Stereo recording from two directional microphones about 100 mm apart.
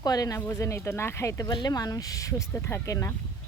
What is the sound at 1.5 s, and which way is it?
Speech, 45° left (ahead or behind).